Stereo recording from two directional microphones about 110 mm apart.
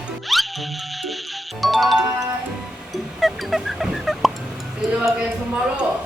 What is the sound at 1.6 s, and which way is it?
Music, centre (ahead or behind).